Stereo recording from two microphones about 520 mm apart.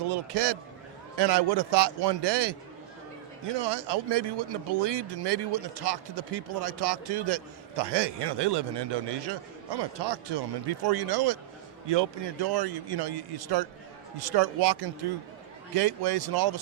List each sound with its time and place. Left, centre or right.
0.1 s speech: right